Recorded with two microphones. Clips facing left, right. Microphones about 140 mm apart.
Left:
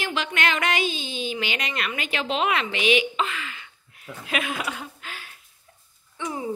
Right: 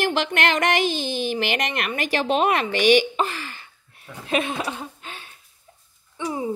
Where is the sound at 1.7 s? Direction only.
50° right (ahead or behind).